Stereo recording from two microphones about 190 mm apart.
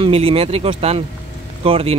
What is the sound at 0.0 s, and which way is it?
Speech, 30° right (ahead or behind).